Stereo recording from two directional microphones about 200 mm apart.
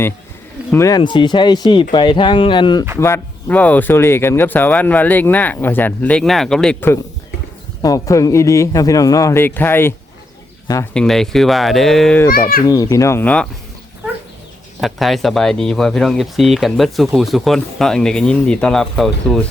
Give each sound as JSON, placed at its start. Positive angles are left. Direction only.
{"t": 0.7, "sound": "speech", "side_deg": 15}
{"t": 3.0, "sound": "speech", "side_deg": 10}
{"t": 10.9, "sound": "speech", "side_deg": 0}
{"t": 12.6, "sound": "speech", "side_deg": 20}
{"t": 14.8, "sound": "speech", "side_deg": 0}